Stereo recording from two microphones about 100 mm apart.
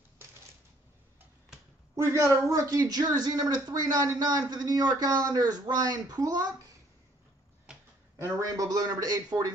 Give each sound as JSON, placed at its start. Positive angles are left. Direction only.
{"t": 2.1, "sound": "speech", "side_deg": -30}
{"t": 8.2, "sound": "speech", "side_deg": -35}